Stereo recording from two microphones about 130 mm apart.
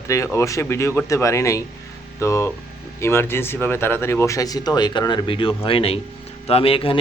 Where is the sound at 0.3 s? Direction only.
20° left (ahead or behind).